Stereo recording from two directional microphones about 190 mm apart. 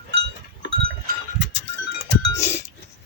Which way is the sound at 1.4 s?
70° left (ahead or behind).